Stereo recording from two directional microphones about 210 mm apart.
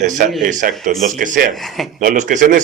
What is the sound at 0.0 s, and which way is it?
A man's voice, 35° right (ahead or behind).